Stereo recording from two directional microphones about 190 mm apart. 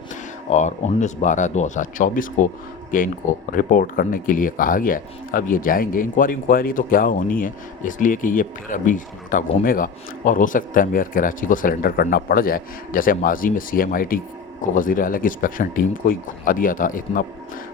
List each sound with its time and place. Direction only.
0.5 s a man's voice: 40° left (ahead or behind)